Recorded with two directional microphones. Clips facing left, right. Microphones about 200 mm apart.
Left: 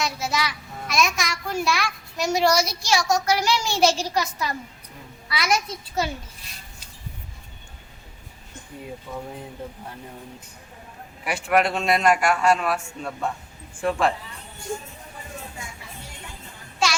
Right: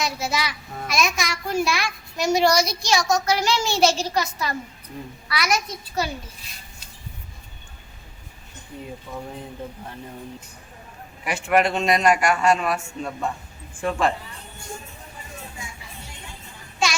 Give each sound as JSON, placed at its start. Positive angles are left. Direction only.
{"t": 0.0, "sound": "a child's voice", "side_deg": 0}
{"t": 5.3, "sound": "a child's voice", "side_deg": 25}
{"t": 11.3, "sound": "a child's voice", "side_deg": 0}